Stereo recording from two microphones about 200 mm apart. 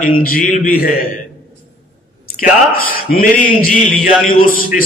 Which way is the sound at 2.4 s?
45° left (ahead or behind).